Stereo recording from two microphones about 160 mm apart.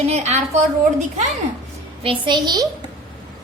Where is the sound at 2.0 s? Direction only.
30° right (ahead or behind).